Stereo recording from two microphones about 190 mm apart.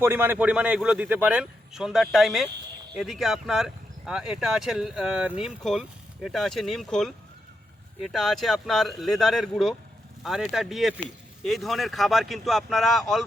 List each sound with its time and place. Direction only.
0.0 s speech: 10° right (ahead or behind)
8.1 s speech: centre (ahead or behind)